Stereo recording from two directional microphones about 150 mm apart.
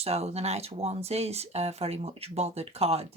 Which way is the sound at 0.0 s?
45° right (ahead or behind).